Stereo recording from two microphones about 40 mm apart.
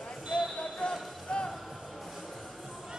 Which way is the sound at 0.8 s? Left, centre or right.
Left.